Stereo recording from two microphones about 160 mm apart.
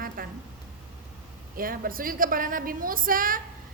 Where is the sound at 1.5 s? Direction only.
60° right (ahead or behind).